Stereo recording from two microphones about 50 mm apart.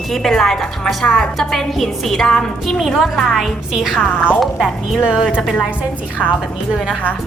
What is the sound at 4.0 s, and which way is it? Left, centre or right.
Speech, left.